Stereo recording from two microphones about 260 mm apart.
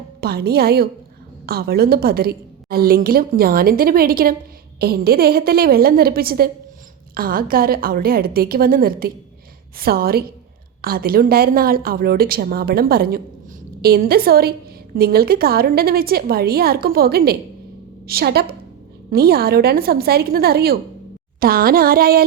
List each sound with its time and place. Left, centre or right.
0.2 s a woman's voice: right